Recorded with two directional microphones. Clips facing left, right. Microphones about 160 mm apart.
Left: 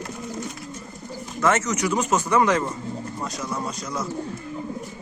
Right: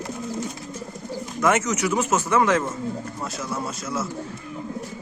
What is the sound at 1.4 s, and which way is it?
Speech, 10° right (ahead or behind).